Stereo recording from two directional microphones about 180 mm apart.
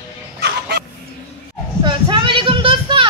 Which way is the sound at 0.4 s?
65° right (ahead or behind).